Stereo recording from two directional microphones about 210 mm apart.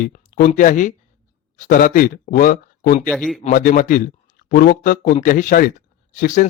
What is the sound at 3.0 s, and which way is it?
Speech, 5° left (ahead or behind).